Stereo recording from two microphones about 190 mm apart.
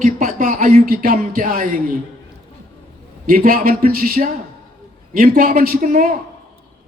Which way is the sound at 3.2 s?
50° right (ahead or behind).